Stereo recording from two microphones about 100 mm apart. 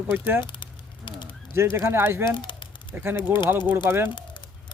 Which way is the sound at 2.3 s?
50° left (ahead or behind).